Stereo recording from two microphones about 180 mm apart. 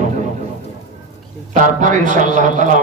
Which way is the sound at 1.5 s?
45° right (ahead or behind).